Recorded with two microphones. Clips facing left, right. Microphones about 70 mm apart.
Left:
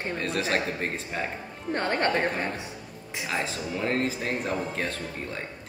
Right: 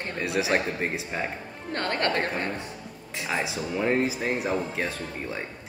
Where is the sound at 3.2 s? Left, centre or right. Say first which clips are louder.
Right 2 dB; centre.